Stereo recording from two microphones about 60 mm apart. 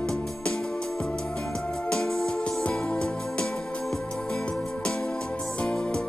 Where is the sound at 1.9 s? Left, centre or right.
Centre.